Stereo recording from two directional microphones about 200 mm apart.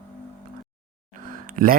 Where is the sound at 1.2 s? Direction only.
45° right (ahead or behind).